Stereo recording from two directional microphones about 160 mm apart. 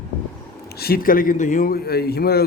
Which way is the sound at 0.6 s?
75° left (ahead or behind).